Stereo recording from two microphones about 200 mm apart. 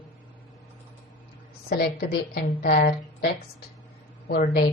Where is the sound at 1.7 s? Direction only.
50° left (ahead or behind).